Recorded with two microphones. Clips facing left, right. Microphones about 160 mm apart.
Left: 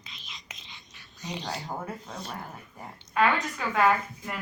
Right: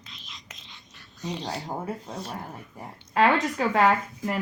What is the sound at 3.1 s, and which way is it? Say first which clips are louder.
Speech: right 4 dB; 30° right (ahead or behind).